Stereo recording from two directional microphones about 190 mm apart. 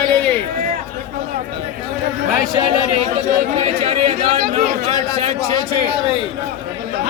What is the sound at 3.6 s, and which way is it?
Chatter, 30° right (ahead or behind).